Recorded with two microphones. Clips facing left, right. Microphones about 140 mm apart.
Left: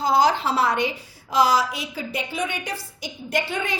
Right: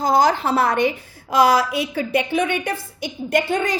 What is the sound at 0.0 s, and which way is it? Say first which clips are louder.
A woman's voice: right 2 dB; 45° right (ahead or behind).